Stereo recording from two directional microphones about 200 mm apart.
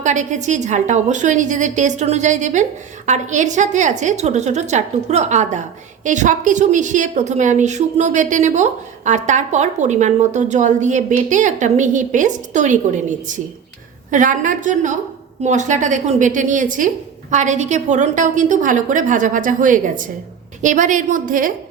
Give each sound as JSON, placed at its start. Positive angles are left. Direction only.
{"t": 0.0, "sound": "a woman's voice", "side_deg": -35}